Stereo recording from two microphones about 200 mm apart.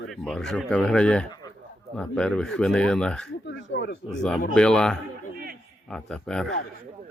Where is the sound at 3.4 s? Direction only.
60° left (ahead or behind).